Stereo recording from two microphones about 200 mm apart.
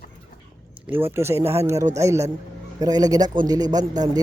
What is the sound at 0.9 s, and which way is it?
Speech, 10° right (ahead or behind).